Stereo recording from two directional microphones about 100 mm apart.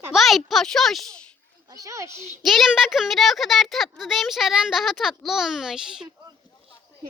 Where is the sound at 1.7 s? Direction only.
35° right (ahead or behind).